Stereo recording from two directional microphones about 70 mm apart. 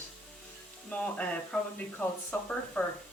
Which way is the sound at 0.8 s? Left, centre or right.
Centre.